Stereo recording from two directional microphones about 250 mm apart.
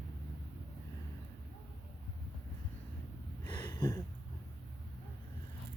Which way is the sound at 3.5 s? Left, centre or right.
Centre.